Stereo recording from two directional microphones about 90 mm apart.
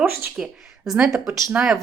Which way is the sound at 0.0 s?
25° right (ahead or behind).